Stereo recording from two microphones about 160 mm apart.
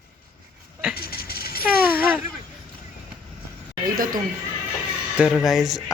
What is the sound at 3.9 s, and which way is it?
Speech, 60° right (ahead or behind).